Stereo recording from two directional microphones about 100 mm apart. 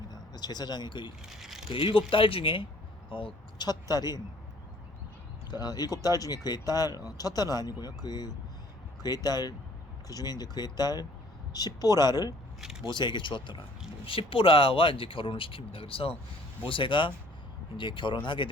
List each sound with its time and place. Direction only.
0.1 s speech: 45° left (ahead or behind)
1.3 s speech: 5° right (ahead or behind)
1.6 s speech: 65° left (ahead or behind)
3.7 s speech: 40° left (ahead or behind)
5.5 s speech: 40° left (ahead or behind)
14.0 s speech: 65° left (ahead or behind)
16.6 s speech: 60° left (ahead or behind)